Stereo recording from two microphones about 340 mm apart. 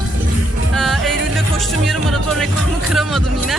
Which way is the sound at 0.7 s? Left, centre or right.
Centre.